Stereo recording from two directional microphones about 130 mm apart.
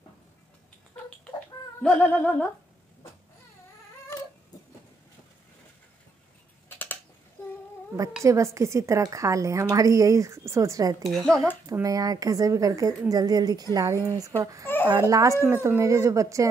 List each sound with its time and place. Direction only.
1.8 s a sound: 10° left (ahead or behind)
8.2 s a woman's voice: 25° right (ahead or behind)
11.1 s speech: 5° left (ahead or behind)
11.8 s a woman's voice: 30° right (ahead or behind)